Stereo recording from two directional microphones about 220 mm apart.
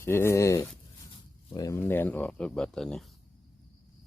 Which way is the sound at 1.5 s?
15° left (ahead or behind).